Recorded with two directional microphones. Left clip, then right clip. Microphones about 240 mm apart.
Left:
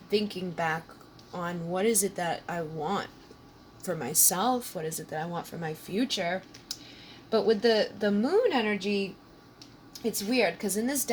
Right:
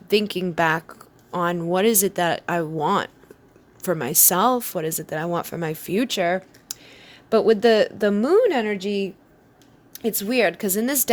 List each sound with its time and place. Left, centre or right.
0.1 s a woman's voice: right